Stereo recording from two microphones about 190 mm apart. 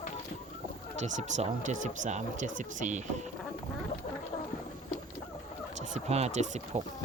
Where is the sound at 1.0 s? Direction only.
40° right (ahead or behind).